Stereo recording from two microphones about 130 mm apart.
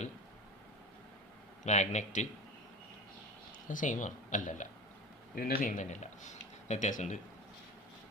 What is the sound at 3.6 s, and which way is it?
Speech, 85° left.